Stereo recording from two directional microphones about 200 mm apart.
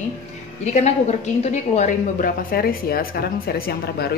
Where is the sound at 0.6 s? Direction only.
35° left (ahead or behind).